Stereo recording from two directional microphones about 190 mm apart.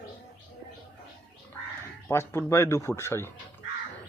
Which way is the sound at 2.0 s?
10° left (ahead or behind).